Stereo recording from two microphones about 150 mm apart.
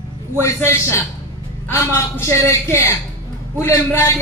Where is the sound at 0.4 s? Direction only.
20° left (ahead or behind).